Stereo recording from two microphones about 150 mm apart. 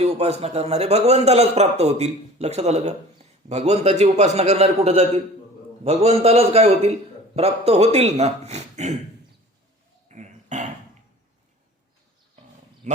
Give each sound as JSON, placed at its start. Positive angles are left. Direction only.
{"t": 0.0, "sound": "a man's voice", "side_deg": -45}
{"t": 10.1, "sound": "a sound", "side_deg": -50}
{"t": 12.8, "sound": "speech", "side_deg": -55}